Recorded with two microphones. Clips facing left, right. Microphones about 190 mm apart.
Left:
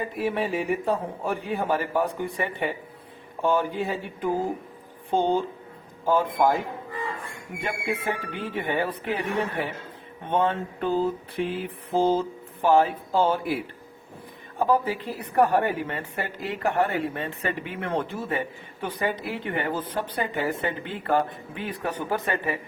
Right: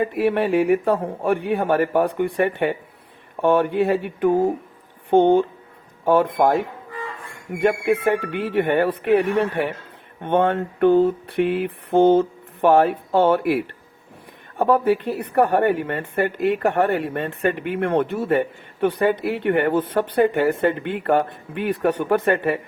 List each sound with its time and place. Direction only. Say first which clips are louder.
0.0 s a man's voice: right 7 dB; 65° right (ahead or behind)
7.6 s a man's voice: right 11 dB; 65° right (ahead or behind)
14.6 s a woman's voice: right 6 dB; 65° right (ahead or behind)